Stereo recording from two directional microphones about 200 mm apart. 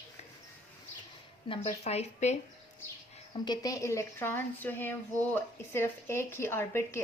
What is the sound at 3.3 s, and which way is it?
A woman's voice, 20° left (ahead or behind).